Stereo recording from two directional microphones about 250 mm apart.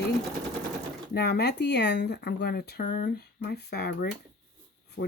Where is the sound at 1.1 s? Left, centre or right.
Left.